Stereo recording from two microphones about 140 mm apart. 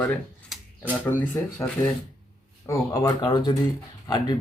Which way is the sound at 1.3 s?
15° left (ahead or behind).